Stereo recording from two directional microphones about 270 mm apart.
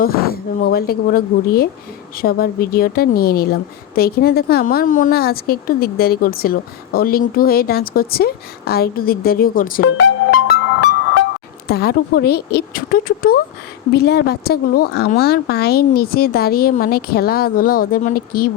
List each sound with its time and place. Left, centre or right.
0.0 s a woman's voice: left
10.0 s music: left
11.7 s a woman's voice: left